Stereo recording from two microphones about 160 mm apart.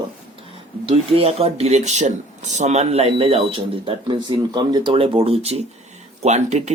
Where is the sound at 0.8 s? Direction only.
35° right (ahead or behind).